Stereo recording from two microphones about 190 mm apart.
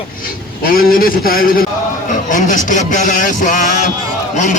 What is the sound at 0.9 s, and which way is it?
A man's voice, 50° left (ahead or behind).